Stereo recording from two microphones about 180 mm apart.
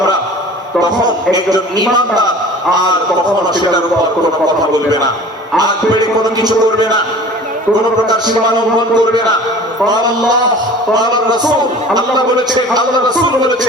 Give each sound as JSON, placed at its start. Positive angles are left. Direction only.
{"t": 0.8, "sound": "speech", "side_deg": -20}
{"t": 5.5, "sound": "speech", "side_deg": -20}
{"t": 8.5, "sound": "speech", "side_deg": -25}